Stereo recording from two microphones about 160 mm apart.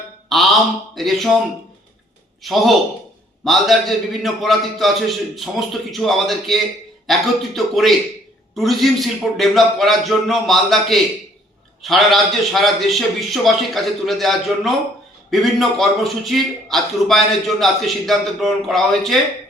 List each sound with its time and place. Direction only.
0.3 s a man's voice: centre (ahead or behind)
2.4 s a man's voice: centre (ahead or behind)